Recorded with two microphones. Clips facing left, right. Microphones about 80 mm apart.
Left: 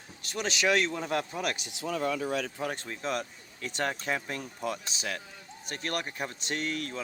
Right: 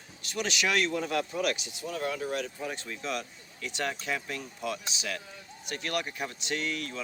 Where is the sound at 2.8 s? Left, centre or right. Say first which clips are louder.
Left 2 dB; left.